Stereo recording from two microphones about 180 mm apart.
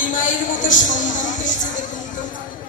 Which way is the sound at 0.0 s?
45° left (ahead or behind).